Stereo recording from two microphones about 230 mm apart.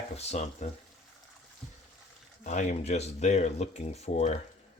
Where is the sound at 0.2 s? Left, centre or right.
Left.